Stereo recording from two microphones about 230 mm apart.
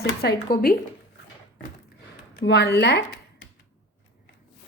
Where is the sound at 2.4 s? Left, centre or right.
Left.